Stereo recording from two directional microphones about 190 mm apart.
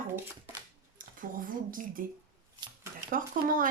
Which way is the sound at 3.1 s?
45° right (ahead or behind).